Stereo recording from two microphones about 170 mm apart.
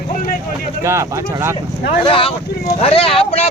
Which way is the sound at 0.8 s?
15° right (ahead or behind).